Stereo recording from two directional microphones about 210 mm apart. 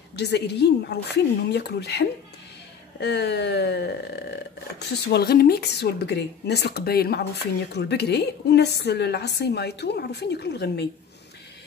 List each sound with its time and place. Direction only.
0.1 s speech: 55° left (ahead or behind)